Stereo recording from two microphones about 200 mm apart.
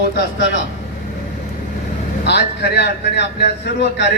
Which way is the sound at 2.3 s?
55° left (ahead or behind).